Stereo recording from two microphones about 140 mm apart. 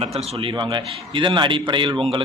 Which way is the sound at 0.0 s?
50° right (ahead or behind).